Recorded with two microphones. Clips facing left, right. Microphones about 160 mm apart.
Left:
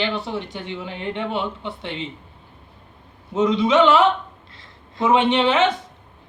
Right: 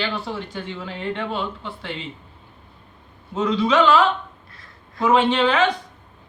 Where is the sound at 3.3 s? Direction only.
20° left (ahead or behind).